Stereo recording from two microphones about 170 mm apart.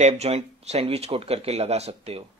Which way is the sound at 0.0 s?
40° right (ahead or behind).